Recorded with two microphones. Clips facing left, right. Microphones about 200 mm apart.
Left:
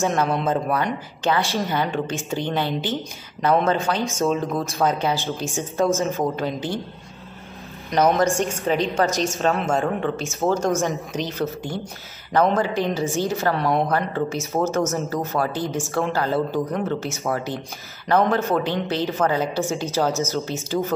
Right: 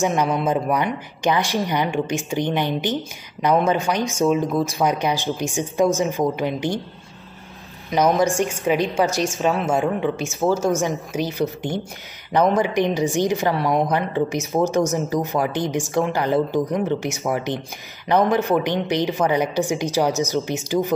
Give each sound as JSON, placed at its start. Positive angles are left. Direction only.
{"t": 0.0, "sound": "speech", "side_deg": -15}
{"t": 7.9, "sound": "a woman's voice", "side_deg": -5}